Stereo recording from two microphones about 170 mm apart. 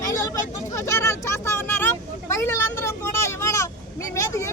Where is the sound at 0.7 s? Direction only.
15° left (ahead or behind).